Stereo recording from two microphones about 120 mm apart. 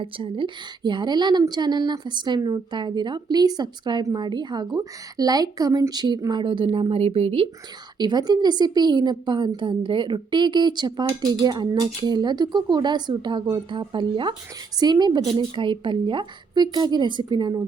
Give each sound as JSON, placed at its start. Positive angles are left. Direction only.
{"t": 0.0, "sound": "a woman's voice", "side_deg": -45}
{"t": 7.9, "sound": "a woman's voice", "side_deg": -35}